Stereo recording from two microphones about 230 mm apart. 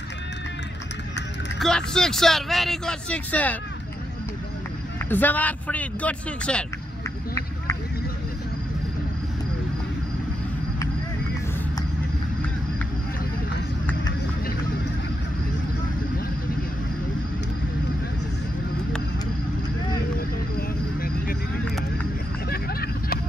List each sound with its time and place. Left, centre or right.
1.6 s speech: centre
5.1 s speech: centre
20.2 s vehicle: left
22.5 s vehicle: left